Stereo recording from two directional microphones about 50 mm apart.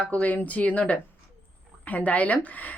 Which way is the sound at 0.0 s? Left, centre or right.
Left.